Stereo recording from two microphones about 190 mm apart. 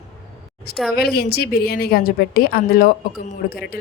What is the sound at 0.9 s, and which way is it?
A woman's voice, 55° left (ahead or behind).